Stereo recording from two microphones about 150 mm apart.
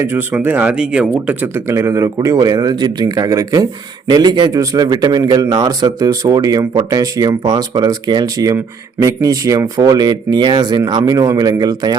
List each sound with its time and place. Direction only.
0.0 s speech: 15° right (ahead or behind)